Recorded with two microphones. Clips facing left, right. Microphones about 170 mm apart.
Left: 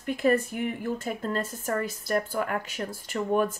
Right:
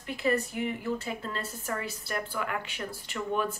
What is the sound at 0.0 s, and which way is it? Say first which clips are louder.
Speech: left 5 dB; 50° left (ahead or behind).